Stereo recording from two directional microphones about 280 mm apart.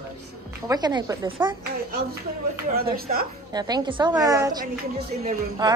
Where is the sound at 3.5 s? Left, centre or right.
Centre.